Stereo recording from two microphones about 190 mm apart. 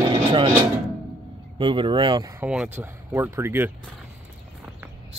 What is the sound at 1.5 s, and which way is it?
Speech, 25° right (ahead or behind).